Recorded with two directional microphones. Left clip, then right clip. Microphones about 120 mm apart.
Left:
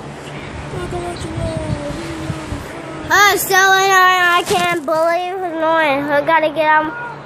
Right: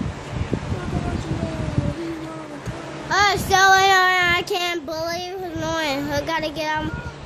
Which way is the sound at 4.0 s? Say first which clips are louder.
Left 6 dB; 30° right (ahead or behind).